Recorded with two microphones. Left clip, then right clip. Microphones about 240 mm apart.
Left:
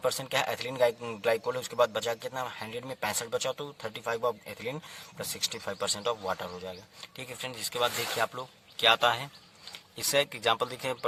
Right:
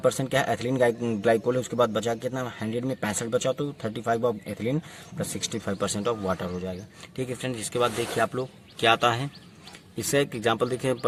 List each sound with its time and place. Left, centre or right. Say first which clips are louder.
0.0 s a man's voice: right 5 dB; left